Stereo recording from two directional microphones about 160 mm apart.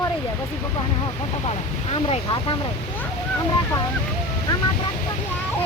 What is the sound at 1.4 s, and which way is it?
Speech, 40° left (ahead or behind).